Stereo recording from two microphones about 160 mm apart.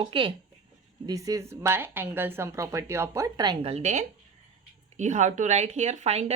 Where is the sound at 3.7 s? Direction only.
45° right (ahead or behind).